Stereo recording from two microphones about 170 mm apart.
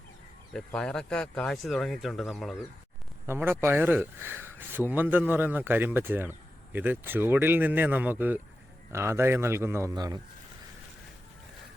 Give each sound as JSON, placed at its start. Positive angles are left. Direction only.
{"t": 0.5, "sound": "speech", "side_deg": 5}
{"t": 3.2, "sound": "speech", "side_deg": -15}